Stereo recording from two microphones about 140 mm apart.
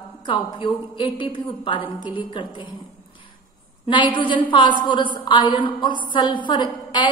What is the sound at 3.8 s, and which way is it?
A woman's voice, 35° left (ahead or behind).